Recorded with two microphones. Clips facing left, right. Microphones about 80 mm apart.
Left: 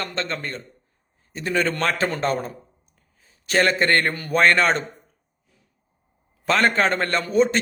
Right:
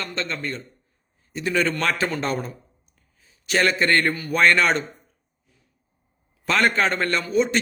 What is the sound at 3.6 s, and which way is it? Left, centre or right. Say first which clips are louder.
A man's voice: even; left.